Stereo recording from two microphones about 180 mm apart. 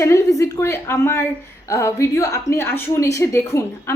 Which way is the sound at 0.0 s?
15° left (ahead or behind).